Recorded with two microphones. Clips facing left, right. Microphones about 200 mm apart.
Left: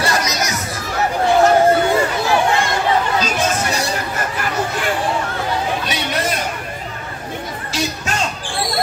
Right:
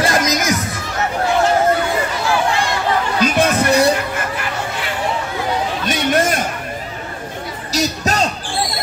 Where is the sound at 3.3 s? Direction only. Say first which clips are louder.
Right 6 dB; 60° right (ahead or behind).